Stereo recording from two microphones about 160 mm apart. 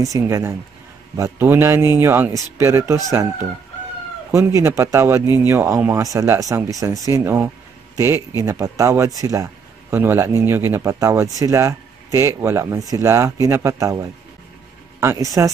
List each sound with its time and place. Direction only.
0.0 s a man's voice: 20° right (ahead or behind)
4.3 s speech: 20° right (ahead or behind)